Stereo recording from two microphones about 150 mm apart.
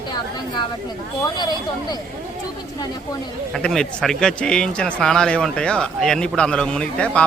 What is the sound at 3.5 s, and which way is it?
Speech, 5° left (ahead or behind).